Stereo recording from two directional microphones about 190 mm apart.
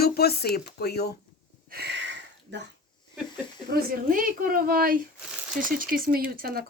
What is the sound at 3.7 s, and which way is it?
Speech, 50° right (ahead or behind).